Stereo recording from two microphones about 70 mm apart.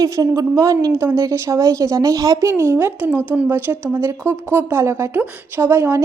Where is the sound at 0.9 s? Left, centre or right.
Right.